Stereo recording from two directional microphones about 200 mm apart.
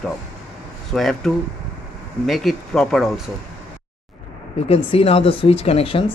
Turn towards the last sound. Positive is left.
turn(degrees=30)  # may be behind; listen again after turning